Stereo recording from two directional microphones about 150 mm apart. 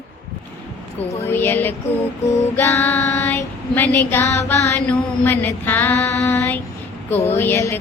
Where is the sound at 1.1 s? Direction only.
15° left (ahead or behind).